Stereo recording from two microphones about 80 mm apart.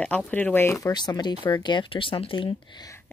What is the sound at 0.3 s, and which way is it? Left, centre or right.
Speech, left.